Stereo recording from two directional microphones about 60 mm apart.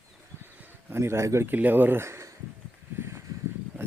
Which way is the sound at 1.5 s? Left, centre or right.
Right.